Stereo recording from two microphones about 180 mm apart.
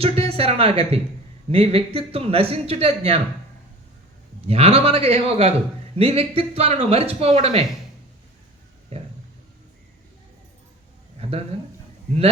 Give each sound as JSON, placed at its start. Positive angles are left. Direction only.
{"t": 0.0, "sound": "a man's voice", "side_deg": -35}
{"t": 4.4, "sound": "a man's voice", "side_deg": -35}
{"t": 11.2, "sound": "a sound", "side_deg": -35}